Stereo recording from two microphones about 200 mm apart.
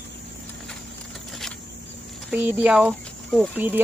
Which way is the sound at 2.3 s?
10° right (ahead or behind).